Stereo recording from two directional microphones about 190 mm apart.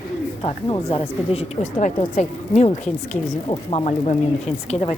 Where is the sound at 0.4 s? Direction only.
30° left (ahead or behind).